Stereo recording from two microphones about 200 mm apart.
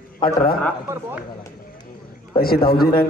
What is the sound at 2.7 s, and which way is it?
Speech, 50° left (ahead or behind).